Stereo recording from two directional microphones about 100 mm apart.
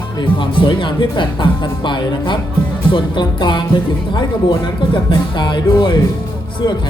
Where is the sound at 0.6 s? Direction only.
55° left (ahead or behind).